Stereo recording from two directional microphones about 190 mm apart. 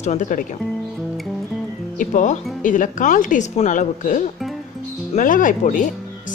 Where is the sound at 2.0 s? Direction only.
40° left (ahead or behind).